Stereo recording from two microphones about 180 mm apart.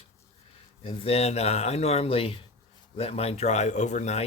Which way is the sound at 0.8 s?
30° left (ahead or behind).